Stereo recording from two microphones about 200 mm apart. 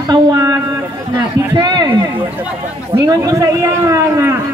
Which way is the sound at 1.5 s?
20° right (ahead or behind).